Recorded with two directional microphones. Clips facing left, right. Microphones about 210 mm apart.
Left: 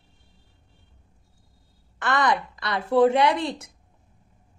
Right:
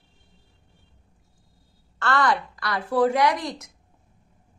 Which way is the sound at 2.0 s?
20° left (ahead or behind).